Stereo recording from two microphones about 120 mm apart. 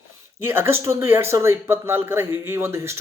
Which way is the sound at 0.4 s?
20° right (ahead or behind).